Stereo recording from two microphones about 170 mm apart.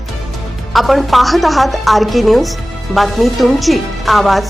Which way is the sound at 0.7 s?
Centre (ahead or behind).